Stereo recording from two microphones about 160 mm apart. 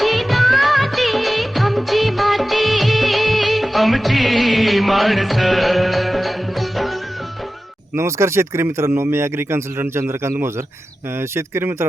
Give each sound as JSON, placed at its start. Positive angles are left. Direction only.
{"t": 0.0, "sound": "music of bollywood", "side_deg": 0}
{"t": 7.9, "sound": "speech", "side_deg": -15}